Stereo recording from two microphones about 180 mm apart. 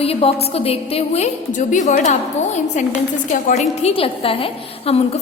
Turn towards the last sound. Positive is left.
turn(degrees=35)  # may be behind; listen again after turning